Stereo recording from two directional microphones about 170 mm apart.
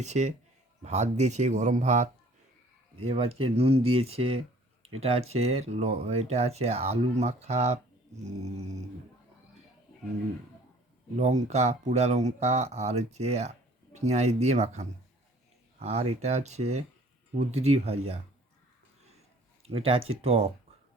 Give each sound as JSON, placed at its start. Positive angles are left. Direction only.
{"t": 0.0, "sound": "speech", "side_deg": -45}
{"t": 11.2, "sound": "speech", "side_deg": -45}
{"t": 19.6, "sound": "speech", "side_deg": -35}